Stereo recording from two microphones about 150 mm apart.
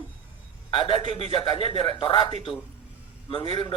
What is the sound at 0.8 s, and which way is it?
Speech, 35° left (ahead or behind).